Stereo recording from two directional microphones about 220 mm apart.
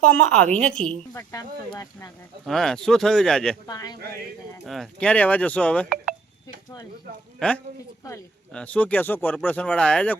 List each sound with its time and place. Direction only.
0.1 s speech: 5° left (ahead or behind)
2.5 s speech: centre (ahead or behind)
3.7 s speech: 15° left (ahead or behind)
4.6 s speech: centre (ahead or behind)
7.3 s a man's voice: 5° left (ahead or behind)